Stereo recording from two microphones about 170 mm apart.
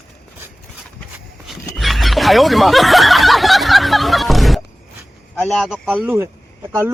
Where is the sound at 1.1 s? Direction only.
Centre (ahead or behind).